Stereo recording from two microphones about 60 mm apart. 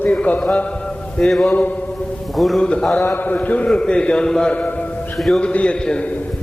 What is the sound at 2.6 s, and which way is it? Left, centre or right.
Speech, centre.